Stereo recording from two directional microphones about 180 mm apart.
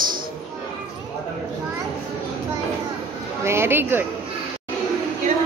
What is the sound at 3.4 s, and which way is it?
Speech, 15° right (ahead or behind).